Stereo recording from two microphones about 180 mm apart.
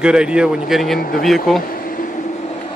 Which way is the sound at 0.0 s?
5° right (ahead or behind).